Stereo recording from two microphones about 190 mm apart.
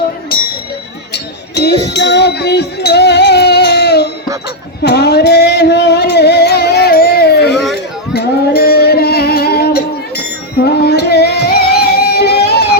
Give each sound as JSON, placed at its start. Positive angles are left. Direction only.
{"t": 1.1, "sound": "music", "side_deg": 60}